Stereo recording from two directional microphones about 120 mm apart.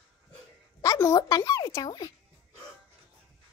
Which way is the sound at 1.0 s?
30° left (ahead or behind).